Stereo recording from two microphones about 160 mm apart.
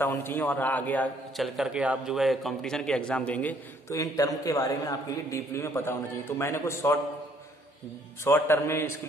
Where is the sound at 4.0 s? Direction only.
20° left (ahead or behind).